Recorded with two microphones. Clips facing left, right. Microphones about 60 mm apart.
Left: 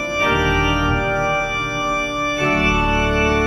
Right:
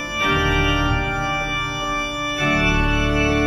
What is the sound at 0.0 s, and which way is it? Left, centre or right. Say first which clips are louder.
Organ: left 3 dB; centre.